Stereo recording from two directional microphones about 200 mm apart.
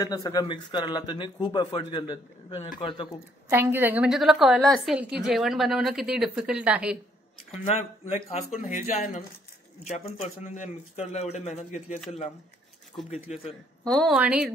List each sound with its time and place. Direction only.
0.0 s a man's voice: 20° left (ahead or behind)
3.4 s a woman's voice: 10° right (ahead or behind)
7.5 s speech: 30° left (ahead or behind)
13.3 s speech: 35° left (ahead or behind)
13.8 s a woman's voice: centre (ahead or behind)